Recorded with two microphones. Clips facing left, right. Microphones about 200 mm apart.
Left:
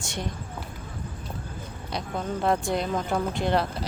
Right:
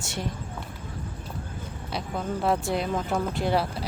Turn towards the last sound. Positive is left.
turn(degrees=-5)  # may be behind; listen again after turning